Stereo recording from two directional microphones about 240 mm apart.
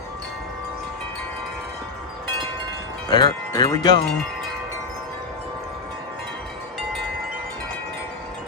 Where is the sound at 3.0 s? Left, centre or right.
Centre.